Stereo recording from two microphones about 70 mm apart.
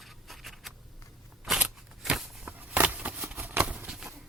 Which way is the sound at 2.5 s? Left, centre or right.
Right.